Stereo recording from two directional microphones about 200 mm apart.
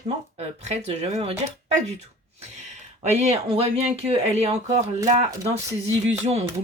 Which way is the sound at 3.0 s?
35° right (ahead or behind).